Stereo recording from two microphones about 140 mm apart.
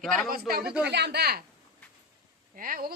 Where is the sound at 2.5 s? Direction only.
90° right.